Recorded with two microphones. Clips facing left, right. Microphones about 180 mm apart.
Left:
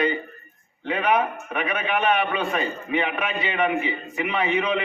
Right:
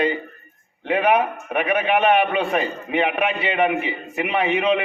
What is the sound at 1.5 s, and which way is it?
A man's voice, 65° right (ahead or behind).